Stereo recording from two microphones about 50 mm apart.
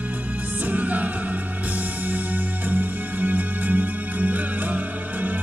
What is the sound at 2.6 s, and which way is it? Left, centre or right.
Music, right.